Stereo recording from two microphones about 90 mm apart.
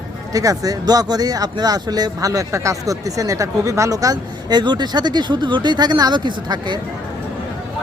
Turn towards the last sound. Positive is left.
turn(degrees=-55)  # may be behind; listen again after turning